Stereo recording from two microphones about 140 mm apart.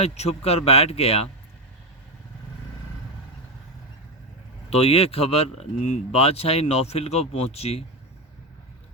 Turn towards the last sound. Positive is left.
turn(degrees=45)  # may be behind; listen again after turning